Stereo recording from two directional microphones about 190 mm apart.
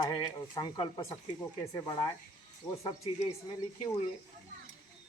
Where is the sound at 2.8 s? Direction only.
35° left (ahead or behind).